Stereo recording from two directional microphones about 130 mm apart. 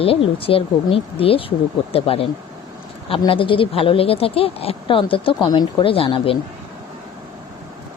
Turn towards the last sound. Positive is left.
turn(degrees=45)  # may be behind; listen again after turning